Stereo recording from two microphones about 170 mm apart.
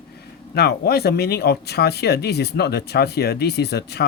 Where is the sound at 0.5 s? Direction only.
65° left (ahead or behind).